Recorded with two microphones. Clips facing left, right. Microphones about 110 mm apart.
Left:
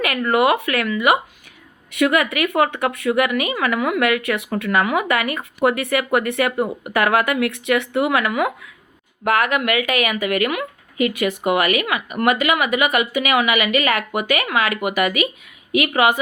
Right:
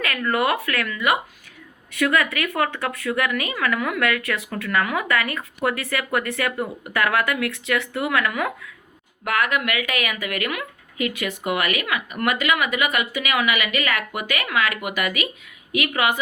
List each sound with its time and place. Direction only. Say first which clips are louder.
0.3 s a woman's voice: left 5 dB; 20° left (ahead or behind)